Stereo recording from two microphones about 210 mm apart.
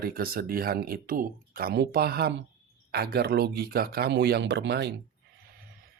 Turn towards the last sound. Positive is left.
turn(degrees=-55)  # may be behind; listen again after turning